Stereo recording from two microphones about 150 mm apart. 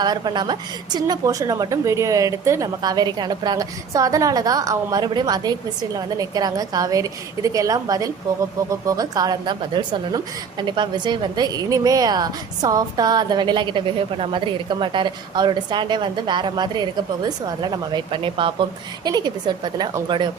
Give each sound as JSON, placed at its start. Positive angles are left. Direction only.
{"t": 0.0, "sound": "a woman's voice", "side_deg": -30}